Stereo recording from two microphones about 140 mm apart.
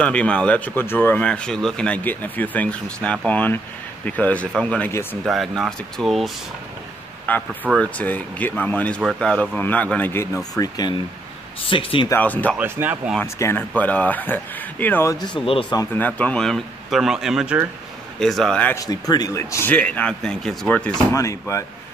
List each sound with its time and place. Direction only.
0.0 s speech: 10° left (ahead or behind)
7.3 s speech: 10° left (ahead or behind); by 11.0 s 25° left (ahead or behind)
11.6 s speech: 40° left (ahead or behind)
12.1 s speech: 10° left (ahead or behind)
12.5 s speech: 15° right (ahead or behind)
13.2 s speech: 15° left (ahead or behind)
15.1 s speech: 35° left (ahead or behind)
15.7 s speech: 25° left (ahead or behind)
16.0 s speech: 10° left (ahead or behind)
18.8 s speech: 25° left (ahead or behind)
19.7 s speech: 10° left (ahead or behind)
21.1 s speech: 20° left (ahead or behind)